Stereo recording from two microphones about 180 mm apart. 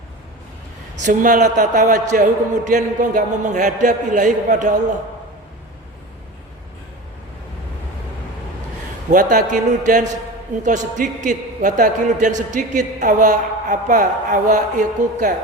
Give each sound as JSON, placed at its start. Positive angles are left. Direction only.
{"t": 0.9, "sound": "a man's voice", "side_deg": -45}
{"t": 9.0, "sound": "a man's voice", "side_deg": -45}